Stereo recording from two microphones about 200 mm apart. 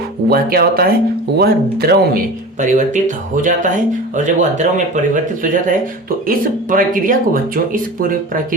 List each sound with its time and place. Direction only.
0.3 s speech: 50° right (ahead or behind)